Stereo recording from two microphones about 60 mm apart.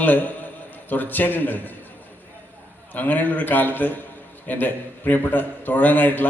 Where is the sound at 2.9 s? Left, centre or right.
Left.